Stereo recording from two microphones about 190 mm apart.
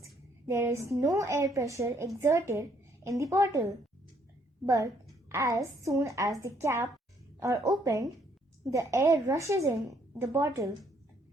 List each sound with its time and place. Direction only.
0.0 s a woman's voice: 15° right (ahead or behind)